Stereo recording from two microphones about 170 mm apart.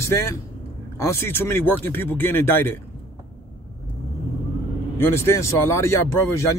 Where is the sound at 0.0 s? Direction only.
15° left (ahead or behind).